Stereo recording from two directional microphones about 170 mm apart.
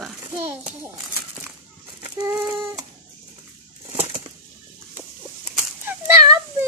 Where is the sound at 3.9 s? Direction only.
35° right (ahead or behind).